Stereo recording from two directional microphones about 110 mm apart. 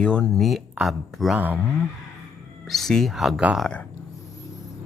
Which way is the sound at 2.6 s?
Centre (ahead or behind).